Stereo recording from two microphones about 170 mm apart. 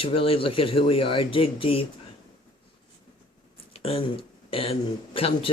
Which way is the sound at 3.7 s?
35° left (ahead or behind).